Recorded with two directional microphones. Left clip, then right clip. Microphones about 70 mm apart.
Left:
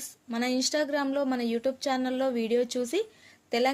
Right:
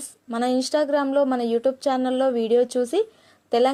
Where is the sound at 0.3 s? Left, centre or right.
Centre.